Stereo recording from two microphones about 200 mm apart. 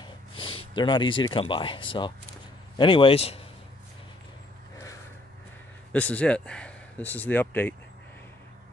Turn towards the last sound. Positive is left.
turn(degrees=10)  # may be behind; listen again after turning